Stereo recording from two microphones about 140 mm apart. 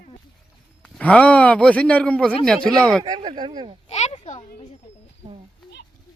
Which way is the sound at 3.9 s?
50° left (ahead or behind).